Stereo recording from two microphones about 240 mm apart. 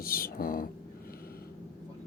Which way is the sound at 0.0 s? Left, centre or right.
Left.